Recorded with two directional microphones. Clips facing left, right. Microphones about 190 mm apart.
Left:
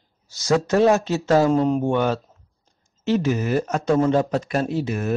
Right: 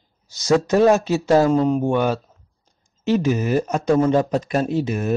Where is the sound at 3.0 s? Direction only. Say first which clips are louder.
Right 2 dB; 15° right (ahead or behind).